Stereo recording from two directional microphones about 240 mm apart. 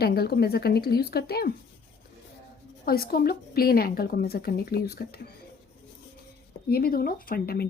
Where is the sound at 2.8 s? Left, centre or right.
Left.